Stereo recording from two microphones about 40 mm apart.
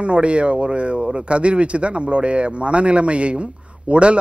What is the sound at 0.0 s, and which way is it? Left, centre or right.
Speech, right.